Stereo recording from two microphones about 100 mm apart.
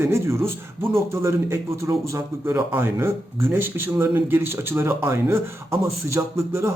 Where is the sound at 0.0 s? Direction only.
25° right (ahead or behind).